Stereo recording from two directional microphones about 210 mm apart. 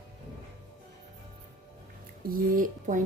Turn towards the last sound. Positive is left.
turn(degrees=-40)  # may be behind; listen again after turning